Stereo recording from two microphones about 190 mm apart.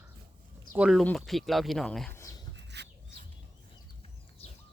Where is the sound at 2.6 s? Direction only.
65° right (ahead or behind).